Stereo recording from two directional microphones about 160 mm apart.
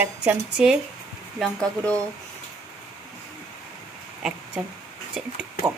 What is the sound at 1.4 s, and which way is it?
Speech, 5° left (ahead or behind).